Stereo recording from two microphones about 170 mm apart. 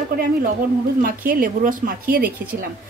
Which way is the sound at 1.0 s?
55° right (ahead or behind).